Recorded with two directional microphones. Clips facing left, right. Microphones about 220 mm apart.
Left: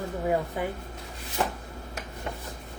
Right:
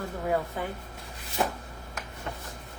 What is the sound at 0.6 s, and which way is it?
Speech, 15° left (ahead or behind).